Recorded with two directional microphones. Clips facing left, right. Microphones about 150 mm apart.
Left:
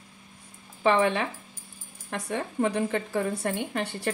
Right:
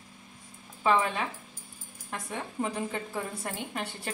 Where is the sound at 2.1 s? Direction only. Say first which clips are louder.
Left 6 dB; 75° left (ahead or behind).